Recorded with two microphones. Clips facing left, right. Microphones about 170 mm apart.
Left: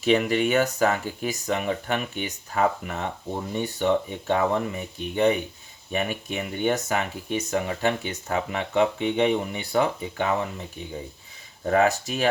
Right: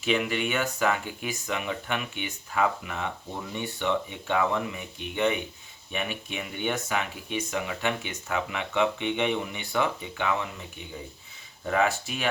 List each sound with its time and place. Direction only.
0.0 s speech: 40° left (ahead or behind)
11.6 s speech: 40° left (ahead or behind)